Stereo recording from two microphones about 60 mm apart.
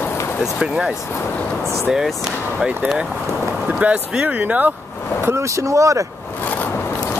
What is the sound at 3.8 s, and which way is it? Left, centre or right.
Speech, right.